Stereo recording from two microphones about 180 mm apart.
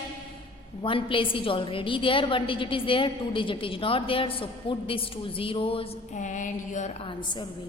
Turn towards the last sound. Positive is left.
turn(degrees=25)  # may be behind; listen again after turning